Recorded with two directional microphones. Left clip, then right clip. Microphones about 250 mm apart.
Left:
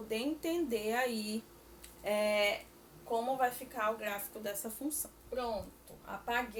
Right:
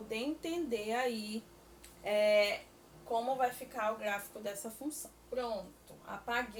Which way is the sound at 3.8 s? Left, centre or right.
Left.